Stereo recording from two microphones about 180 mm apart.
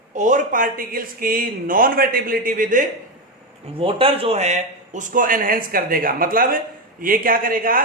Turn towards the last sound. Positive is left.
turn(degrees=-50)  # may be behind; listen again after turning